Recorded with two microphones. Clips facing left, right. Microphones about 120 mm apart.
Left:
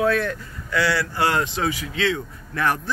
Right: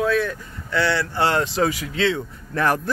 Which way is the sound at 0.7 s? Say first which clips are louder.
Right 1 dB; 25° right (ahead or behind).